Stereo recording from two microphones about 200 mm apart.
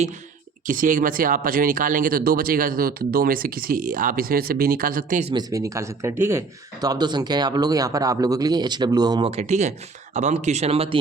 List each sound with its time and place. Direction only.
0.7 s speech: 40° right (ahead or behind)
5.3 s speech: 20° right (ahead or behind)